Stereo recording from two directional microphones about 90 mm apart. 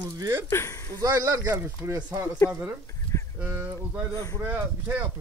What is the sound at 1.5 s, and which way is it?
Speech, 25° right (ahead or behind).